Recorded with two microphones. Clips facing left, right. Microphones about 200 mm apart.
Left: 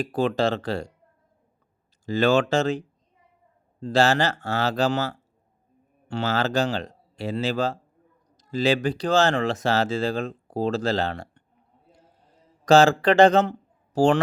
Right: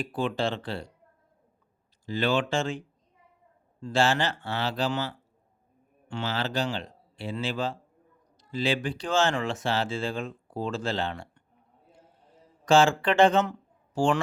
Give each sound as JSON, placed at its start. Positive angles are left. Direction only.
{"t": 0.0, "sound": "speech", "side_deg": 40}
{"t": 2.0, "sound": "speech", "side_deg": 45}
{"t": 12.6, "sound": "speech", "side_deg": 40}